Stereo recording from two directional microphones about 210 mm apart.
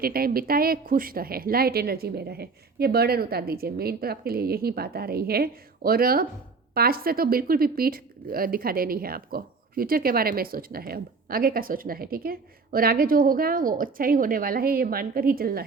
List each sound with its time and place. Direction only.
0.0 s speech: 45° right (ahead or behind)